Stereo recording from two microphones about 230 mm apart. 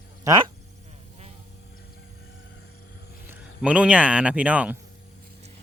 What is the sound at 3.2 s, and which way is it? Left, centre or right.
Speech, centre.